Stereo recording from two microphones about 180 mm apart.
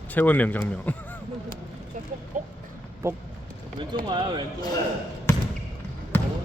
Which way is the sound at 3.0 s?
15° right (ahead or behind).